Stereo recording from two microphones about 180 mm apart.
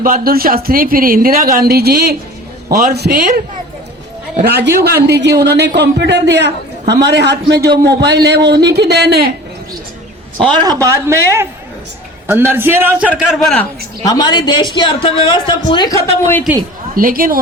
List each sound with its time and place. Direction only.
0.0 s speech: 55° right (ahead or behind)
4.4 s a man's voice: 60° right (ahead or behind)
10.5 s speech: 20° right (ahead or behind)
13.1 s a man's voice: centre (ahead or behind)
14.0 s a man's voice: 20° left (ahead or behind)
16.9 s speech: 50° right (ahead or behind)